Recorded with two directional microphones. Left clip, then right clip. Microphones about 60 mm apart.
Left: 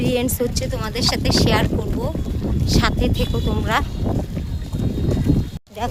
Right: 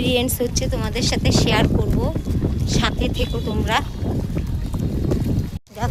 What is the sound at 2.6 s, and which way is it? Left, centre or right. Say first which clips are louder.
Speech: left 3 dB; left.